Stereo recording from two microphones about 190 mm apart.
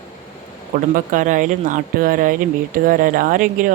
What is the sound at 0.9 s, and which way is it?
Speech, 40° right (ahead or behind).